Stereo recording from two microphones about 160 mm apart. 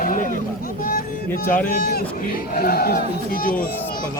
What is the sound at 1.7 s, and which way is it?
Speech, 70° left (ahead or behind).